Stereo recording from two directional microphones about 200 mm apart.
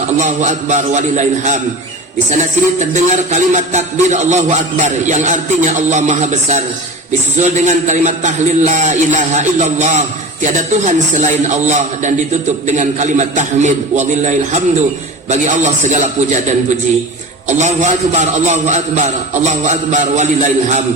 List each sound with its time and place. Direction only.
0.2 s speech: 35° right (ahead or behind)